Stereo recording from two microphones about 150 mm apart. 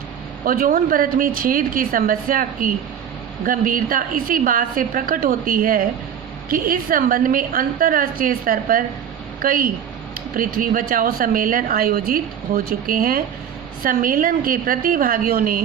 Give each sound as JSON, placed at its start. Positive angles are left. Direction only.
{"t": 0.4, "sound": "speech", "side_deg": -70}